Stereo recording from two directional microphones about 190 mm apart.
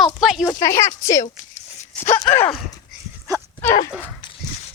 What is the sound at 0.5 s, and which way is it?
Speech, 15° left (ahead or behind).